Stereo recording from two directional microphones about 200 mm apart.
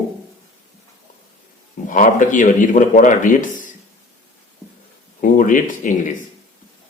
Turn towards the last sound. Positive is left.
turn(degrees=40)  # may be behind; listen again after turning